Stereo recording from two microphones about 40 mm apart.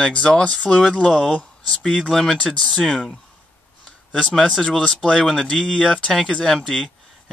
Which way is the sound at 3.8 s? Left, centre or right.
Left.